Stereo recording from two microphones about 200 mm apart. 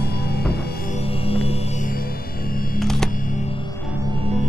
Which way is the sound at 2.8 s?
Centre (ahead or behind).